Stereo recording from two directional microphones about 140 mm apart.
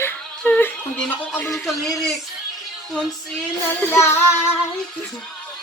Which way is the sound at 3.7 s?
15° left (ahead or behind).